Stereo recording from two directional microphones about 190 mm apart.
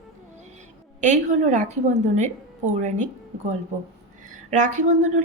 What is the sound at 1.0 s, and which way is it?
A woman's voice, 40° right (ahead or behind).